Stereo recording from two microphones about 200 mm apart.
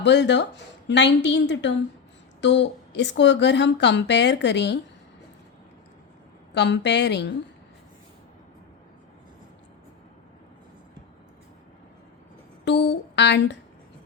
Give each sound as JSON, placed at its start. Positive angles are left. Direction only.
{"t": 0.0, "sound": "speech", "side_deg": 60}
{"t": 6.5, "sound": "speech", "side_deg": 60}
{"t": 12.6, "sound": "speech", "side_deg": 60}